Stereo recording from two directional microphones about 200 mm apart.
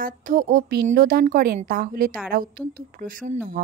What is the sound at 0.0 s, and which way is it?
Speech, 45° right (ahead or behind).